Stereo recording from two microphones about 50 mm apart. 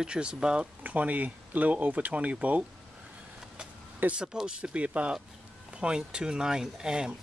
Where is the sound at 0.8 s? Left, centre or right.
Right.